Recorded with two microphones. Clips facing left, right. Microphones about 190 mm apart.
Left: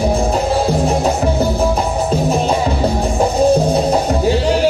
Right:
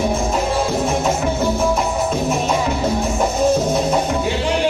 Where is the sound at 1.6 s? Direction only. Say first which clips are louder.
Left 2 dB; 35° left (ahead or behind).